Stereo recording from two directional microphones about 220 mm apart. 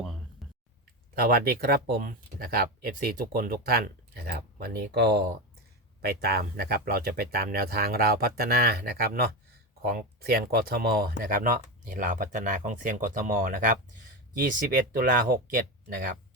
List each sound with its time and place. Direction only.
1.2 s speech: 45° right (ahead or behind)